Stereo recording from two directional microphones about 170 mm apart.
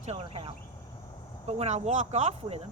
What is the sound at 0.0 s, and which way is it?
Speech, 40° right (ahead or behind).